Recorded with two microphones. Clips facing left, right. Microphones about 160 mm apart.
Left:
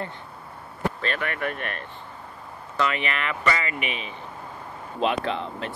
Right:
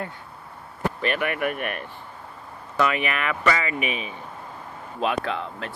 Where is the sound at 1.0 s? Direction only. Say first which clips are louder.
Right 7 dB; 15° right (ahead or behind).